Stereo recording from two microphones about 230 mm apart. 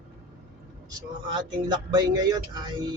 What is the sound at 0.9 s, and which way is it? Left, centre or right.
Speech, centre.